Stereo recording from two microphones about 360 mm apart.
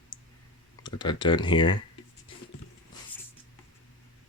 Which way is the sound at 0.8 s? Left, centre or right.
Centre.